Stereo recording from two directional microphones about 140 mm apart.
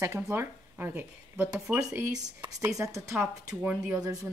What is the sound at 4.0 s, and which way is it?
Speech, 25° right (ahead or behind).